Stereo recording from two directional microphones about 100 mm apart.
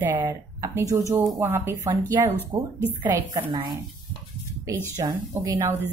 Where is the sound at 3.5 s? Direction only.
40° right (ahead or behind).